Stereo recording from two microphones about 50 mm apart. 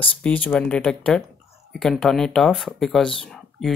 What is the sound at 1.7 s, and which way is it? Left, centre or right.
Speech, centre.